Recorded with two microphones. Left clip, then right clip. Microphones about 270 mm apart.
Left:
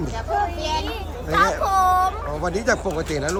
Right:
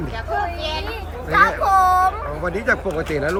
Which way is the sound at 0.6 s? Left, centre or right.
Left.